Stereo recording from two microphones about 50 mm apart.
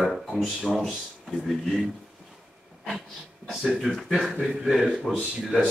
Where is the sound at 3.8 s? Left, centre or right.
Centre.